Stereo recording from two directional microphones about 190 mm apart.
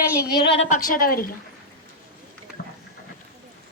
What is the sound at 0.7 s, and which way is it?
Speech, 45° left (ahead or behind).